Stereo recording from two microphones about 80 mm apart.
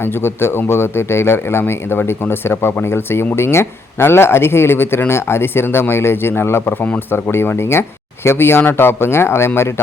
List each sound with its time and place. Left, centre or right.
0.0 s a man's voice: left